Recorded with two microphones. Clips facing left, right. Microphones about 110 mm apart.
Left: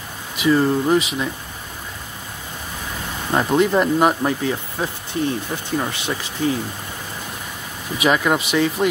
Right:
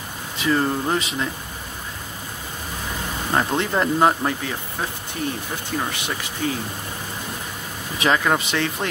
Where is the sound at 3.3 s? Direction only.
15° left (ahead or behind).